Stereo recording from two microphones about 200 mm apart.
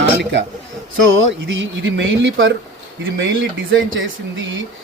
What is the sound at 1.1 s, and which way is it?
Speech, 70° right (ahead or behind).